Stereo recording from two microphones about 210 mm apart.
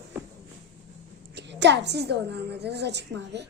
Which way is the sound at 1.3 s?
55° right (ahead or behind).